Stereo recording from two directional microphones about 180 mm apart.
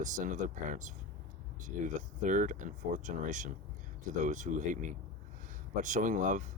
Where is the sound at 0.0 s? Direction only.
45° right (ahead or behind).